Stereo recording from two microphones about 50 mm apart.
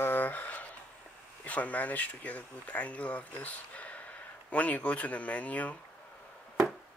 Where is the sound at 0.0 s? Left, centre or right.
Left.